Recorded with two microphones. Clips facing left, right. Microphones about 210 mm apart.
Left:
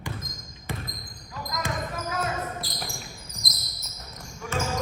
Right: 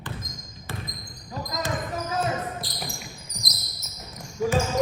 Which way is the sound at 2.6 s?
Centre (ahead or behind).